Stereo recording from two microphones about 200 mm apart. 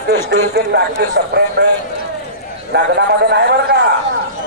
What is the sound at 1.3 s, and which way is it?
Speech, 55° right (ahead or behind).